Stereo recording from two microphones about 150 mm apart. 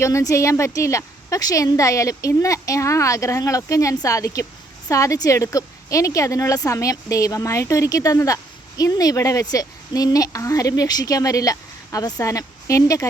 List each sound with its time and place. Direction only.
0.0 s a woman's voice: 20° left (ahead or behind)